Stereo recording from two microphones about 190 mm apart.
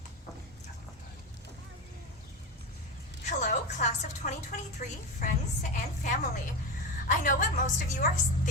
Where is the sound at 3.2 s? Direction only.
40° left (ahead or behind).